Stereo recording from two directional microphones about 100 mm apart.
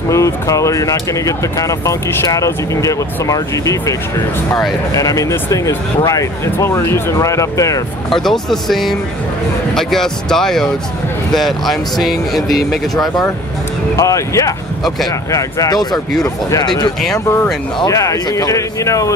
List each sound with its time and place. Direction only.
0.1 s speech: 30° left (ahead or behind)
4.9 s speech: 35° left (ahead or behind)
8.1 s speech: 5° left (ahead or behind)
13.9 s speech: 30° left (ahead or behind)